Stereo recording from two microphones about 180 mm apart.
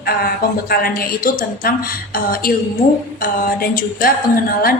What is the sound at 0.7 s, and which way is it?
A woman's voice, 55° left (ahead or behind).